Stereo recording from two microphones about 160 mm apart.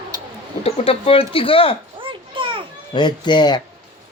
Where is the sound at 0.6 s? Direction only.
40° left (ahead or behind).